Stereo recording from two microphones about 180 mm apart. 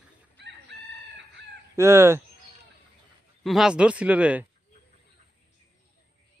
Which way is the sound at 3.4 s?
Centre (ahead or behind).